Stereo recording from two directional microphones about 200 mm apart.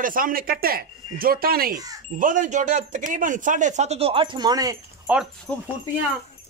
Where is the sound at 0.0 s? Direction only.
45° right (ahead or behind); by 5.1 s 20° right (ahead or behind).